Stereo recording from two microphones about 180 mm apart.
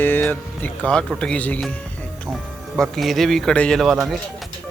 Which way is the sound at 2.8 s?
Centre (ahead or behind).